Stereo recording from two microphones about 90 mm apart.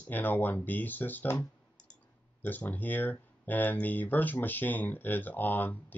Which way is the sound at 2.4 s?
20° left (ahead or behind).